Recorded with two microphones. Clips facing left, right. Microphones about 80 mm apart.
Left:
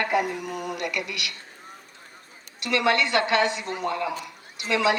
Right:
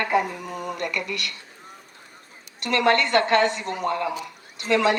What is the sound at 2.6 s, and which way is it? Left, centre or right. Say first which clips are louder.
Speech: right 2 dB; right.